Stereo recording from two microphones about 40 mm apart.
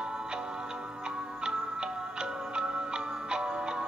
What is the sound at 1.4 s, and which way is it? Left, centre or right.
Music, right.